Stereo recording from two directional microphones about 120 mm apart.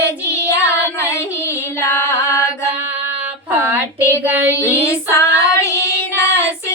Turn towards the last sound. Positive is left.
turn(degrees=20)  # may be behind; listen again after turning